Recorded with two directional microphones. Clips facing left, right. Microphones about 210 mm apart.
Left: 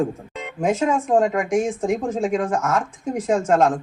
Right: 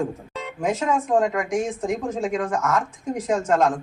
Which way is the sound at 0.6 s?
30° left (ahead or behind).